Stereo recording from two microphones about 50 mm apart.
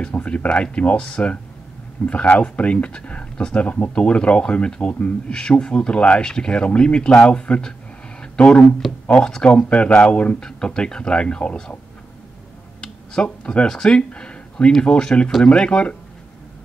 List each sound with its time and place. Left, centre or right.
0.0 s speech: left
8.2 s a sound: left
9.4 s speech: left
10.4 s speech: centre
12.8 s computer keyboard: centre
13.7 s speech: centre